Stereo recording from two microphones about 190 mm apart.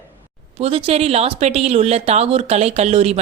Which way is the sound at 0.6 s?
30° right (ahead or behind).